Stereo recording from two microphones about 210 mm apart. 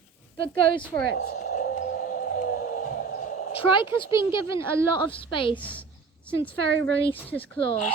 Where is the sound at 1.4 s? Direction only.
40° left (ahead or behind).